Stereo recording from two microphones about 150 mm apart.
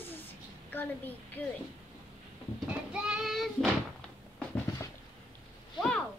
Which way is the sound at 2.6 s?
5° right (ahead or behind).